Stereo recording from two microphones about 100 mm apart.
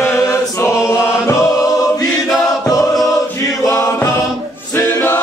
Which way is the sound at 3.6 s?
30° left (ahead or behind).